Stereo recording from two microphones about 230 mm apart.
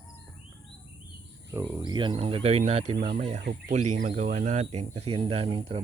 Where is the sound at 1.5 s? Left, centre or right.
Centre.